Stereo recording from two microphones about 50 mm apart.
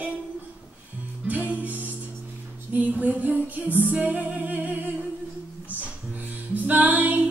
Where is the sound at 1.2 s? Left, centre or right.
Right.